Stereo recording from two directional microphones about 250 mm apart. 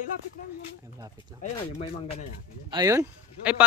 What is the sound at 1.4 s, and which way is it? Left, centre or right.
Speech, left.